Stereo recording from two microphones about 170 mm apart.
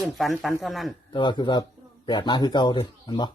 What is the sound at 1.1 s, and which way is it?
Speech, 25° left (ahead or behind).